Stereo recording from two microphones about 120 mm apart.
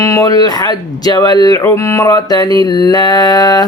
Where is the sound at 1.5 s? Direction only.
25° left (ahead or behind).